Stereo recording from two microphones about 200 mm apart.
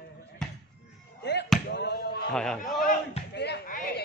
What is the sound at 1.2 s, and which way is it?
Chop, 60° left (ahead or behind).